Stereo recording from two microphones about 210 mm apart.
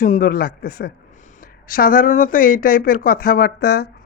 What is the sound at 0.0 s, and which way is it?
Speech, 40° left (ahead or behind).